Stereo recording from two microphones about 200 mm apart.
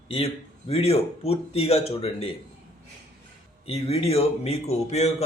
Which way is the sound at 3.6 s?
30° left (ahead or behind).